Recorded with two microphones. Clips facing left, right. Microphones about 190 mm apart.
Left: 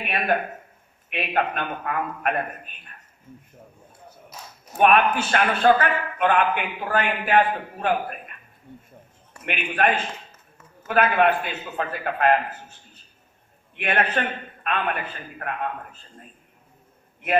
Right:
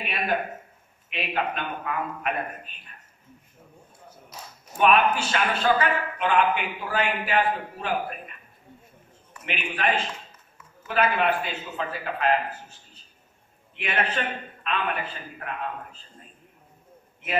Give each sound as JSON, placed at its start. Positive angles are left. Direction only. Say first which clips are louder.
{"t": 1.1, "sound": "a man's voice", "louder": "left 3 dB", "side_deg": 55}
{"t": 4.7, "sound": "a man's voice", "louder": "left 2 dB", "side_deg": 55}
{"t": 13.7, "sound": "a man's voice", "louder": "left 4 dB", "side_deg": 55}